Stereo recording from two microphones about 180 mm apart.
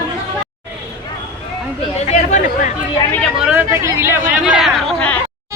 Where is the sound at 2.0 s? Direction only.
45° left (ahead or behind).